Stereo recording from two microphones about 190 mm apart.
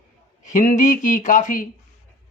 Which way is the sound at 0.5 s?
45° left (ahead or behind).